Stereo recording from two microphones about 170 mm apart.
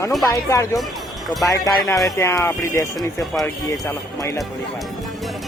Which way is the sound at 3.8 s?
15° left (ahead or behind).